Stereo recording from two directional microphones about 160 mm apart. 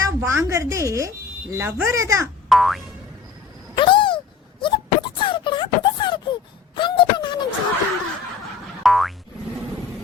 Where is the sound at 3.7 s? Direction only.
30° left (ahead or behind).